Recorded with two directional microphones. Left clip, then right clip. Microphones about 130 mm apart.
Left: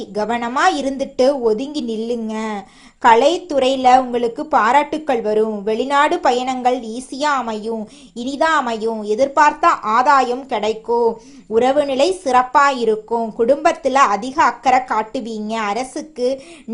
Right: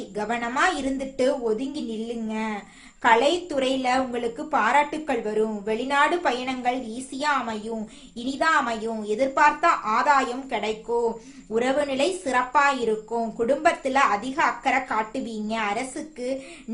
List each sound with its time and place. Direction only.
0.1 s a woman's voice: 50° left (ahead or behind)